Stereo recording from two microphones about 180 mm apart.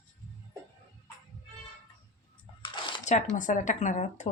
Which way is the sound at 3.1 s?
40° left (ahead or behind).